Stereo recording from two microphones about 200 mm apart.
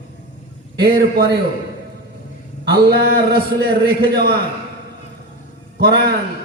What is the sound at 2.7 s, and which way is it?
A man's voice, 50° right (ahead or behind).